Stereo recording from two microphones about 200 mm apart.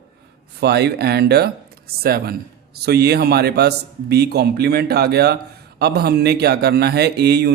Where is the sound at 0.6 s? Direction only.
55° right (ahead or behind).